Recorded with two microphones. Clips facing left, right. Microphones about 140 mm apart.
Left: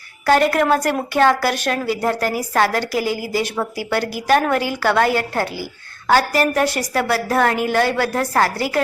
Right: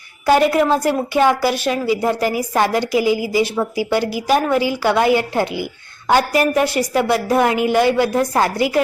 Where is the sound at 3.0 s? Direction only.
45° left (ahead or behind).